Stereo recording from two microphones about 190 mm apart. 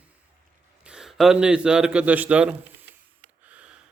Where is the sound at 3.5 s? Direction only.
5° right (ahead or behind).